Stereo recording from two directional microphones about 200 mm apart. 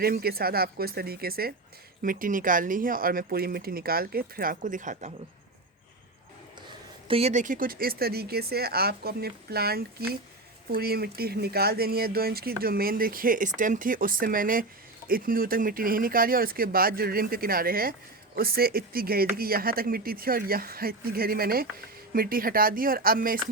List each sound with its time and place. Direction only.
0.0 s speech: 50° right (ahead or behind)
7.1 s speech: 30° right (ahead or behind)